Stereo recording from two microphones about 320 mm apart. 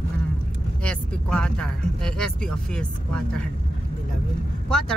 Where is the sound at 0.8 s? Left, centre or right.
Centre.